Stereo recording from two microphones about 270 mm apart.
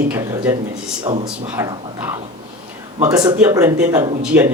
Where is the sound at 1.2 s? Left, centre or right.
Centre.